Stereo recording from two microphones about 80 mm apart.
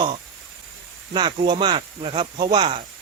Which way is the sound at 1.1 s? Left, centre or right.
Right.